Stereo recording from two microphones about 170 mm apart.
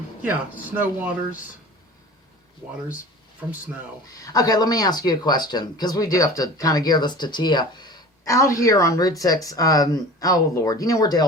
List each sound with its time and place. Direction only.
0.2 s speech: 10° right (ahead or behind)
3.4 s speech: 10° right (ahead or behind)
4.2 s speech: 20° left (ahead or behind)